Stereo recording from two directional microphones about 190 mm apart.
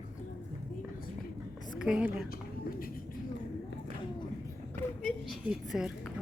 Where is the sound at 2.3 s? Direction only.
50° left (ahead or behind).